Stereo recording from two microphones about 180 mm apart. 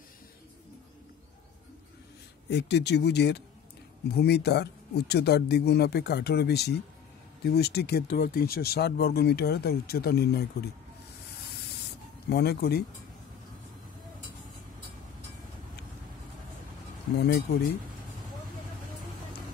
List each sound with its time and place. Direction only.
2.5 s speech: 70° left (ahead or behind)
12.3 s speech: 60° left (ahead or behind)
17.2 s speech: 60° left (ahead or behind)